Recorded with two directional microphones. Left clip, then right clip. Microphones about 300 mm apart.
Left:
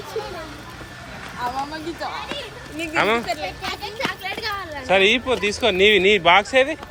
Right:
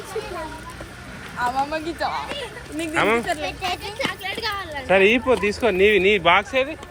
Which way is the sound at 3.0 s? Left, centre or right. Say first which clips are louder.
Even; centre.